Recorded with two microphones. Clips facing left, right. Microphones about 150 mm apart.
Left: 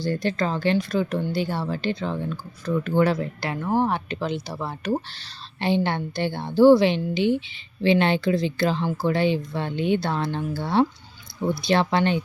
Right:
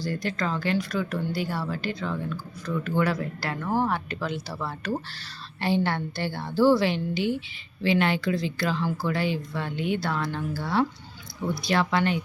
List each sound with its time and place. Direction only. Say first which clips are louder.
0.0 s a woman's voice: left 4 dB; 25° left (ahead or behind)